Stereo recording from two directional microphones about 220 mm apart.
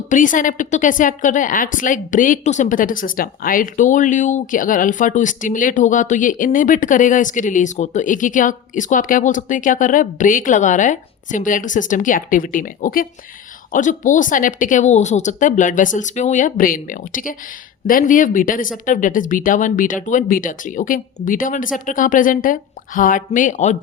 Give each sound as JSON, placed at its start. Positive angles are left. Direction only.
{"t": 0.1, "sound": "a woman's voice", "side_deg": 35}